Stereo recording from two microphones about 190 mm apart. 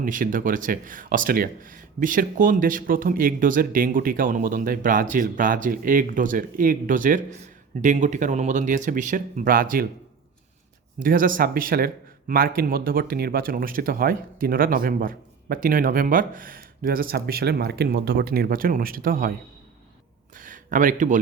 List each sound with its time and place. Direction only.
0.0 s speech: 45° right (ahead or behind)
11.0 s speech: 45° right (ahead or behind)
20.3 s a sound: 45° right (ahead or behind)